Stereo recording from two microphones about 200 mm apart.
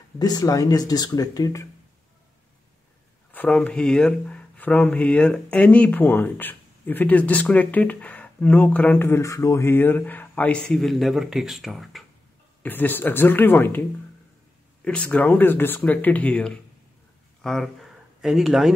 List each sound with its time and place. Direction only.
0.2 s speech: 20° left (ahead or behind)
3.3 s speech: 5° left (ahead or behind)
14.9 s speech: 5° left (ahead or behind)